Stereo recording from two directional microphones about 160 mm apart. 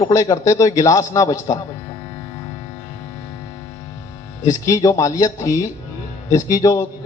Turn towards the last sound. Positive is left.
turn(degrees=20)  # may be behind; listen again after turning